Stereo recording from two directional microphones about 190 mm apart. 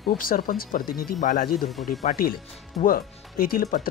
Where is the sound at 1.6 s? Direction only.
Centre (ahead or behind).